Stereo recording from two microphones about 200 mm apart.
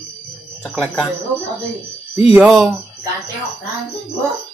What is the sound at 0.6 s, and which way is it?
Speech, 5° left (ahead or behind).